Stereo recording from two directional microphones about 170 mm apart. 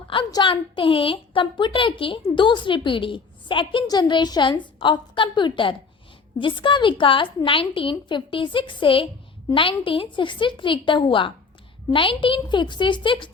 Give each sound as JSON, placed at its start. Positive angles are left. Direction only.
{"t": 0.1, "sound": "a woman's voice", "side_deg": 25}